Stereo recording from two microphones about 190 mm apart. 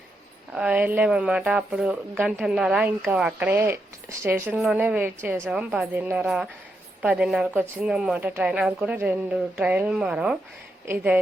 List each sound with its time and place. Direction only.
0.5 s speech: 5° right (ahead or behind)